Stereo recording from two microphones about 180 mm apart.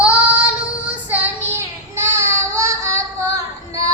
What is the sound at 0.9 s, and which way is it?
Child singing, 10° right (ahead or behind).